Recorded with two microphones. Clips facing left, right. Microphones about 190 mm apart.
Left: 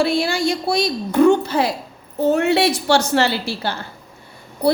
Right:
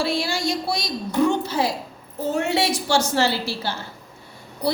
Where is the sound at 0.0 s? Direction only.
55° left (ahead or behind).